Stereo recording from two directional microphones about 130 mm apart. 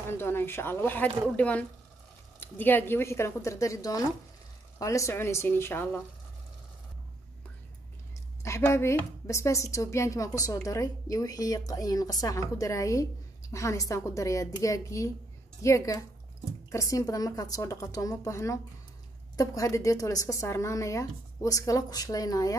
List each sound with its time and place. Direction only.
0.1 s a woman's voice: 15° left (ahead or behind)
8.4 s a woman's voice: 20° left (ahead or behind)